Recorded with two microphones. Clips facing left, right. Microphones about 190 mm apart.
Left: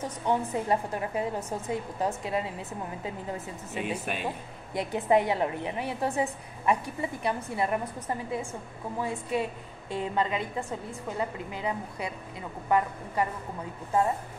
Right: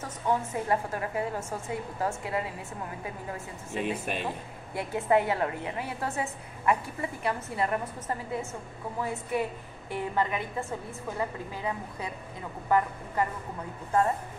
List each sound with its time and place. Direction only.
0.3 s a woman's voice: 20° left (ahead or behind)
3.8 s speech: 5° left (ahead or behind)
4.7 s a woman's voice: 15° left (ahead or behind)